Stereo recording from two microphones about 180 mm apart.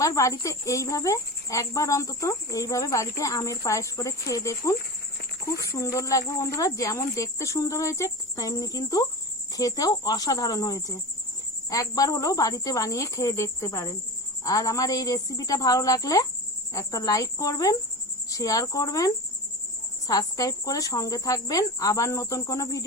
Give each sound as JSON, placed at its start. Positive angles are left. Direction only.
{"t": 0.0, "sound": "speech", "side_deg": 15}